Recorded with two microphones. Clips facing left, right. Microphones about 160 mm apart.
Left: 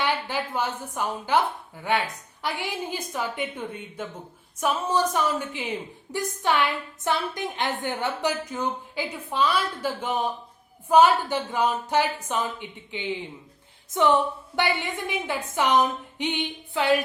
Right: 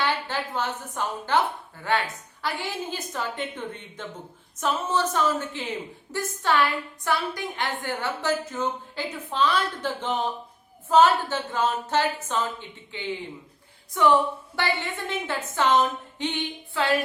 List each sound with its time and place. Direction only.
0.0 s a woman's voice: 10° left (ahead or behind)
2.4 s a woman's voice: 15° left (ahead or behind)